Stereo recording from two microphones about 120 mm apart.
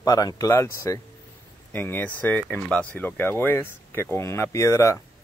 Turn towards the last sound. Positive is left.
turn(degrees=25)  # may be behind; listen again after turning